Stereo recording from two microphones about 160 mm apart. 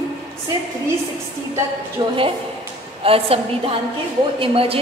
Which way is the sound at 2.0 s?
30° right (ahead or behind).